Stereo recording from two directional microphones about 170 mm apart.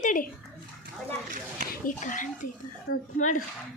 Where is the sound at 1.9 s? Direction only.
50° left (ahead or behind).